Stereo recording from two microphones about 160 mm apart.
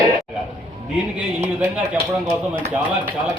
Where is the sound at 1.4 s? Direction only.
5° right (ahead or behind).